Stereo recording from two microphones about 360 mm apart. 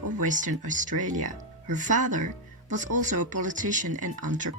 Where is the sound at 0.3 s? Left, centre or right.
Right.